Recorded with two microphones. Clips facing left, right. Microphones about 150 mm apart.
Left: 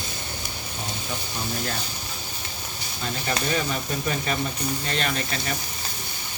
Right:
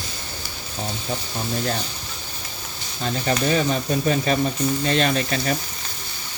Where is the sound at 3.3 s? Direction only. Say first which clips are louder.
Right 6 dB; 35° right (ahead or behind).